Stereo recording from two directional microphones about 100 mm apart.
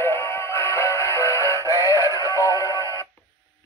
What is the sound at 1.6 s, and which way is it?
Synthetic singing, 30° right (ahead or behind).